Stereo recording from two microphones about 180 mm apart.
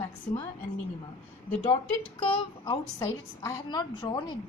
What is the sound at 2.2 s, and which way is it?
A woman's voice, 20° left (ahead or behind).